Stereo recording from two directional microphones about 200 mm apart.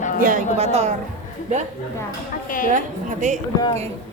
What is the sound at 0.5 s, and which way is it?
Speech, 35° right (ahead or behind).